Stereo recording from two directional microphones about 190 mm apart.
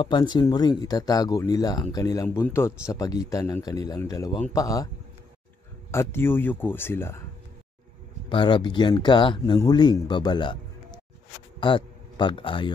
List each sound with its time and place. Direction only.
0.0 s speech: 25° left (ahead or behind)
5.9 s speech: 15° left (ahead or behind)
8.3 s speech: 25° left (ahead or behind)
11.6 s a man's voice: 25° left (ahead or behind)